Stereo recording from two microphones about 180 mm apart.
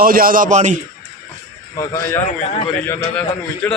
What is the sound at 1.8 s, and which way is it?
Speech, 20° left (ahead or behind).